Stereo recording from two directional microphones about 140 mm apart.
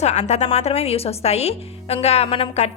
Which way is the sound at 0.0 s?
50° left (ahead or behind).